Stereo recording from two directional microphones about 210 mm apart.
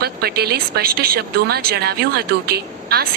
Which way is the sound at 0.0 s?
50° right (ahead or behind).